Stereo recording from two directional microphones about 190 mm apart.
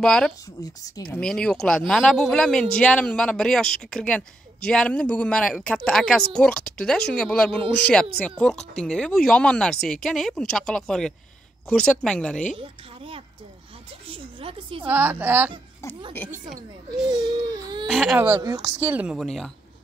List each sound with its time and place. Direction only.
0.0 s a woman's voice: 5° left (ahead or behind)
12.5 s a woman's voice: 30° right (ahead or behind)
14.0 s a sound: 30° right (ahead or behind)
14.9 s speech: 10° right (ahead or behind)
17.8 s a woman's voice: centre (ahead or behind)
18.2 s speech: 15° right (ahead or behind); by 19.5 s centre (ahead or behind)